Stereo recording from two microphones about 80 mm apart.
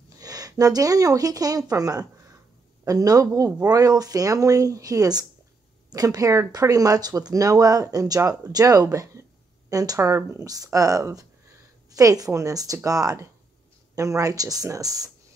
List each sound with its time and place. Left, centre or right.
0.2 s a woman's voice: right
9.9 s speech: right